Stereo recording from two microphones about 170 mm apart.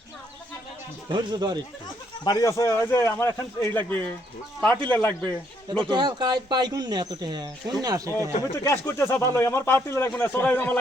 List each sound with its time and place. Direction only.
1.1 s speech: 25° right (ahead or behind)
2.2 s speech: 20° left (ahead or behind)
5.7 s speech: 25° right (ahead or behind)
8.6 s speech: 15° left (ahead or behind)